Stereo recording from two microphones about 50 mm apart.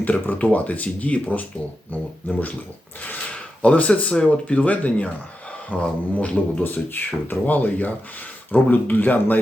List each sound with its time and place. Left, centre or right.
0.0 s speech: left